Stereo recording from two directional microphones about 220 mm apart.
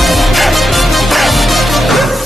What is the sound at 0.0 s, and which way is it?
Music, centre (ahead or behind).